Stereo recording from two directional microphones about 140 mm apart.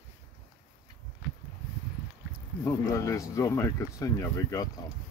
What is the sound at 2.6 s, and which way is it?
Speech, 20° left (ahead or behind).